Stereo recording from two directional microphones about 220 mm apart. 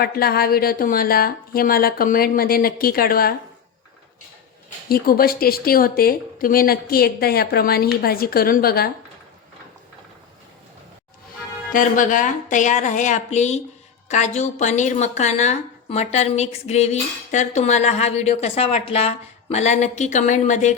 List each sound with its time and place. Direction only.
0.0 s a woman's voice: 45° left (ahead or behind)
4.9 s a woman's voice: 40° left (ahead or behind)
11.7 s a woman's voice: 35° left (ahead or behind)